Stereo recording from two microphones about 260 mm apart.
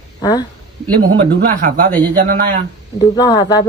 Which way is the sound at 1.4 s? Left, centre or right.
Right.